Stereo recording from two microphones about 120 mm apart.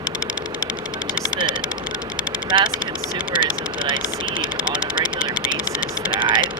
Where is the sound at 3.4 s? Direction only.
40° right (ahead or behind).